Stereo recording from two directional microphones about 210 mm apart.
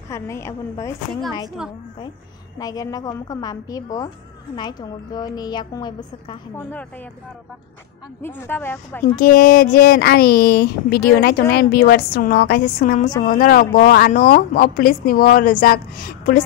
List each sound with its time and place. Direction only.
0.1 s a woman's voice: 15° left (ahead or behind)
1.6 s a woman's voice: 5° right (ahead or behind)
2.6 s a woman's voice: 20° left (ahead or behind)
8.2 s a woman's voice: 10° left (ahead or behind)
9.2 s speech: 45° left (ahead or behind)